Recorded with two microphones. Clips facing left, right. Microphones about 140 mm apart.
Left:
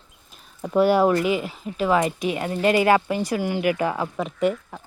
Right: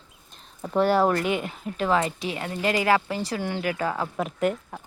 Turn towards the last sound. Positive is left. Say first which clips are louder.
# left 2 dB
turn(degrees=0)  # may be behind; listen again after turning